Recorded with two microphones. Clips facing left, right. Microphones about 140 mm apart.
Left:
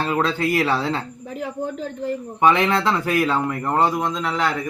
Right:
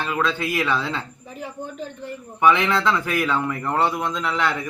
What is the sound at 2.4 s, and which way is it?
Speech, 30° left (ahead or behind).